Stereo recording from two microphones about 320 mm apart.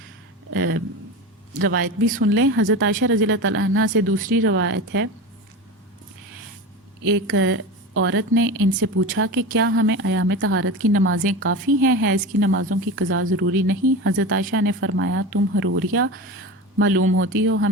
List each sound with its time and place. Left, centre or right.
0.5 s a woman's voice: right
2.2 s a woman's voice: right
4.2 s speech: right
4.5 s a woman's voice: right
7.1 s a woman's voice: right